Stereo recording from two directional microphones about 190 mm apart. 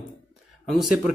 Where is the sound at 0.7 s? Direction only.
Centre (ahead or behind).